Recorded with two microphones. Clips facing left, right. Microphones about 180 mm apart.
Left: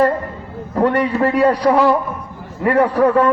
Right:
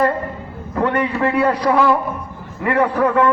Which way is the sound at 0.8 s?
35° left (ahead or behind).